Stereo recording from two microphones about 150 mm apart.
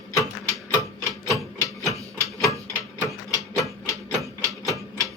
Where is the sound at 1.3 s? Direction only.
20° left (ahead or behind).